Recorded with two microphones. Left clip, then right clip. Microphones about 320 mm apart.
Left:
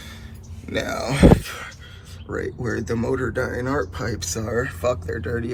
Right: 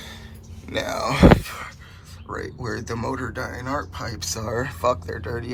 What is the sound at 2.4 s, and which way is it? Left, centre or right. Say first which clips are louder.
Speech: left 5 dB; right.